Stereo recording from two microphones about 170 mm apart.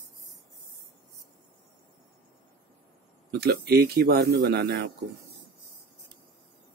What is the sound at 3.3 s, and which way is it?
Speech, 75° right (ahead or behind).